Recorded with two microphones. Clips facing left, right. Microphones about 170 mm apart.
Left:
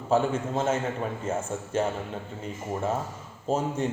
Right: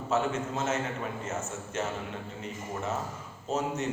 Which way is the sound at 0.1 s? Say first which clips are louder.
Left 5 dB; 30° left (ahead or behind).